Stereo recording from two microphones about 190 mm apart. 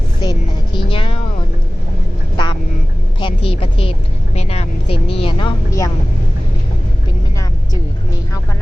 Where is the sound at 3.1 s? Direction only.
30° left (ahead or behind).